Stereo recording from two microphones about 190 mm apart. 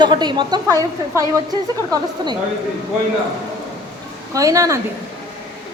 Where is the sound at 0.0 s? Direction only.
25° right (ahead or behind).